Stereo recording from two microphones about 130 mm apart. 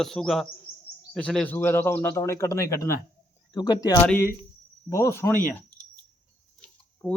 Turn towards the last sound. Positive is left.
turn(degrees=20)  # may be behind; listen again after turning